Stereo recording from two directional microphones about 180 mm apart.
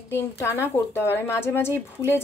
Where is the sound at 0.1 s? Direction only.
15° left (ahead or behind).